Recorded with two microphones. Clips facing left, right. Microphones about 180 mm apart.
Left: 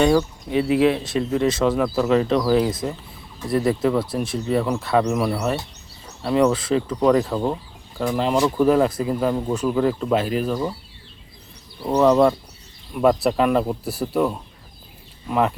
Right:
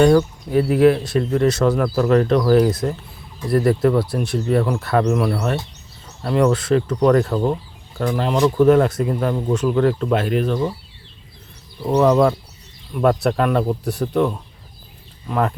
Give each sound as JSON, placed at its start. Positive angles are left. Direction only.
{"t": 0.0, "sound": "speech", "side_deg": 0}
{"t": 0.5, "sound": "speech", "side_deg": 20}
{"t": 1.0, "sound": "speech", "side_deg": 0}
{"t": 11.9, "sound": "speech", "side_deg": 0}